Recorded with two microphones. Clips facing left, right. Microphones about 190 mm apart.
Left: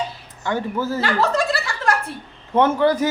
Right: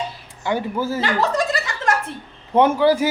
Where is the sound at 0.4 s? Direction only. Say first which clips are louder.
Right 1 dB; 10° right (ahead or behind).